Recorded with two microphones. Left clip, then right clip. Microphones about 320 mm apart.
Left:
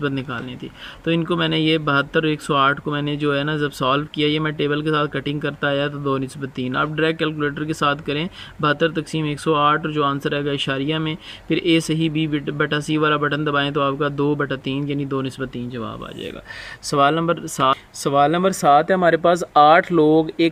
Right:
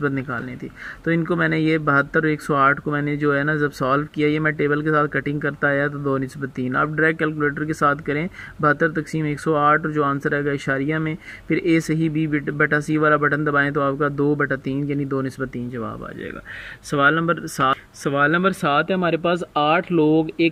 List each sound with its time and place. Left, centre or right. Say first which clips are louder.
0.0 s speech: right 1 dB; centre
16.9 s speech: left 1 dB; centre